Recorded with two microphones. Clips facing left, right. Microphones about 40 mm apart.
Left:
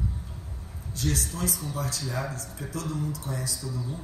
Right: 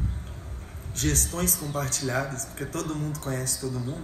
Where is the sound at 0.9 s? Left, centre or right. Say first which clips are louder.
Right 2 dB; right.